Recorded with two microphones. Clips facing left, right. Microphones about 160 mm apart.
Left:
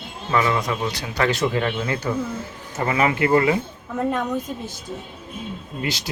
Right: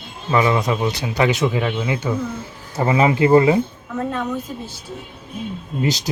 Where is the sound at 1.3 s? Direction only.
5° right (ahead or behind).